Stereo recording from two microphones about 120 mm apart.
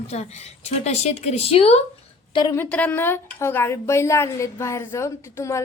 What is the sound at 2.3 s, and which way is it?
Speech, 35° left (ahead or behind).